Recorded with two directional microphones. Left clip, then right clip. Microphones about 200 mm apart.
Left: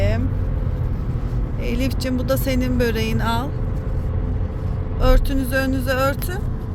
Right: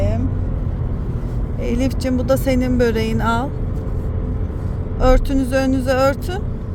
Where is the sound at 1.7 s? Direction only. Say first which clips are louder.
Right 4 dB; 25° right (ahead or behind).